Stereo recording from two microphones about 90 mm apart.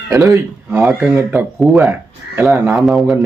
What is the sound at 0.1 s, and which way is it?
Speech, 35° right (ahead or behind).